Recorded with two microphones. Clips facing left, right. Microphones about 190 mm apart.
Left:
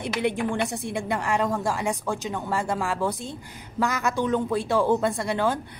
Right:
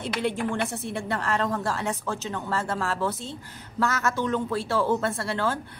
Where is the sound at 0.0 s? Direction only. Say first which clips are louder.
Left 2 dB; 15° left (ahead or behind).